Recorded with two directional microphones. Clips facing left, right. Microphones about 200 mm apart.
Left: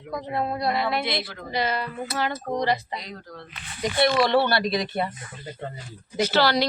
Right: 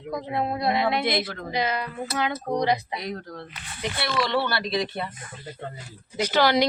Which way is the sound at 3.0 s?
55° right (ahead or behind).